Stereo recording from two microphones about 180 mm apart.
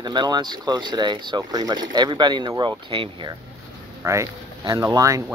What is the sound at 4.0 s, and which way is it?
Speech, 15° right (ahead or behind).